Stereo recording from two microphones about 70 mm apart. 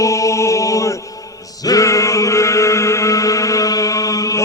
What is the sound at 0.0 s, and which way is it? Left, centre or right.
Chant, left.